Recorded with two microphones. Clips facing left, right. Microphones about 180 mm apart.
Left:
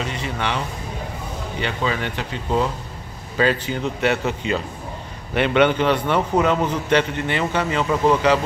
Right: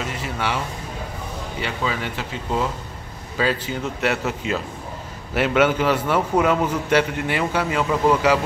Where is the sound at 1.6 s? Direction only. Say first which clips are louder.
Left 2 dB; 5° right (ahead or behind).